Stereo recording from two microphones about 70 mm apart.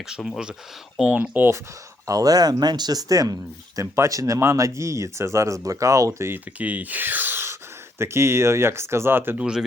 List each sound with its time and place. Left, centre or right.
0.1 s speech: centre
1.2 s speech: right
2.0 s speech: right
6.6 s speech: right